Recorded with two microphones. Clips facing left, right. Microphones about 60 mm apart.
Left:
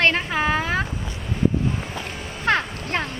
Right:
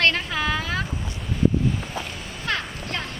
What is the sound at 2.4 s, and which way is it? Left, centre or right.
Music, left.